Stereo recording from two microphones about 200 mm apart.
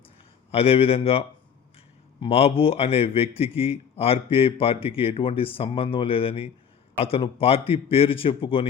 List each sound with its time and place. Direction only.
0.5 s a man's voice: 30° left (ahead or behind)
2.2 s a man's voice: 30° left (ahead or behind)